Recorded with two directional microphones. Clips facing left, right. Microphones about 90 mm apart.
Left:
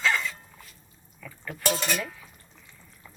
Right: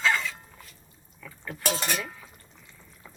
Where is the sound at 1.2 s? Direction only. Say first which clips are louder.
Left 1 dB; centre (ahead or behind).